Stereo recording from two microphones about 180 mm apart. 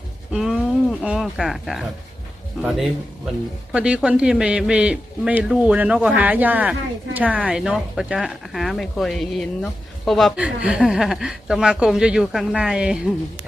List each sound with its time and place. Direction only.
0.3 s a man's voice: centre (ahead or behind)